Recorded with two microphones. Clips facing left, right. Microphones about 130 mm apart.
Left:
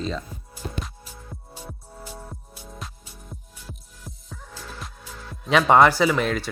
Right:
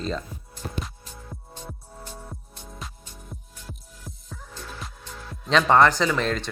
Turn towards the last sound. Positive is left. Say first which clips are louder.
# left 3 dB
turn(degrees=5)  # may be behind; listen again after turning